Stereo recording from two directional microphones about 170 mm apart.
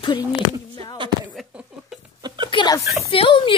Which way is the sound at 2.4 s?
25° left (ahead or behind).